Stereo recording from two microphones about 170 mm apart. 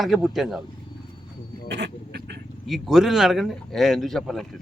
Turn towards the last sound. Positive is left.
turn(degrees=0)  # may be behind; listen again after turning